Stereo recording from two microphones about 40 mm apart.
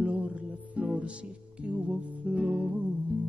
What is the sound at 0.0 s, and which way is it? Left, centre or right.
Music, right.